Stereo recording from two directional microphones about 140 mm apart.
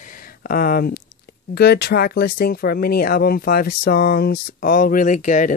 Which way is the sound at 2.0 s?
90° left.